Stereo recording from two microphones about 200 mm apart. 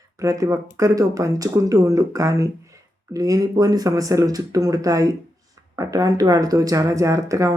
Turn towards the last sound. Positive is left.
turn(degrees=-15)  # may be behind; listen again after turning